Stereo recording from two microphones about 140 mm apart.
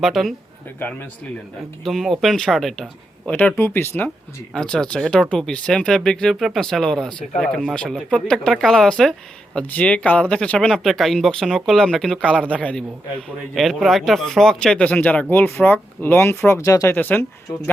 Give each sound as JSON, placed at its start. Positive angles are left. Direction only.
{"t": 0.0, "sound": "speech", "side_deg": 0}
{"t": 0.8, "sound": "speech", "side_deg": 15}
{"t": 1.8, "sound": "speech", "side_deg": 0}
{"t": 17.0, "sound": "speech", "side_deg": 15}